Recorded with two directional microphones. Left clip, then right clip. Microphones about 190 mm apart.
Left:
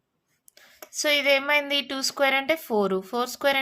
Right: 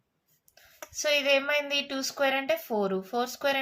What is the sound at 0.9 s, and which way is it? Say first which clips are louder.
A woman's voice: left 3 dB; 40° left (ahead or behind).